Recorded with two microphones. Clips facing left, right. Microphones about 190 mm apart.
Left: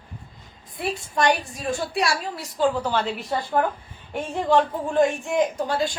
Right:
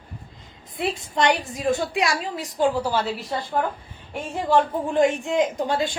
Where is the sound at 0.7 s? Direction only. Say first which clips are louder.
Right 1 dB; 20° right (ahead or behind).